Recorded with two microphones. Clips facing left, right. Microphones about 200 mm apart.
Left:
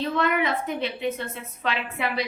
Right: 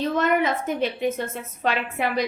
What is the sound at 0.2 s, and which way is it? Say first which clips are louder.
A woman's voice: right 2 dB; 45° right (ahead or behind).